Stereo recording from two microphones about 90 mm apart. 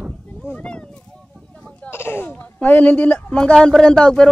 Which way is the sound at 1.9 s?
25° left (ahead or behind).